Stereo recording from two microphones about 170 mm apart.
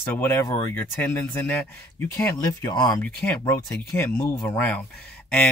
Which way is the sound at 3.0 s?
5° left (ahead or behind).